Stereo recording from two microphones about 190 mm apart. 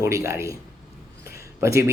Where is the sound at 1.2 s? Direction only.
15° right (ahead or behind).